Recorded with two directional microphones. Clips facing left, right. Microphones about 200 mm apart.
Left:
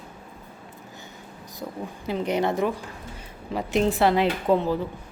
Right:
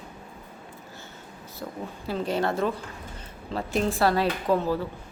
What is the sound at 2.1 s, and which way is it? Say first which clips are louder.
A woman's voice: left 2 dB; 20° left (ahead or behind).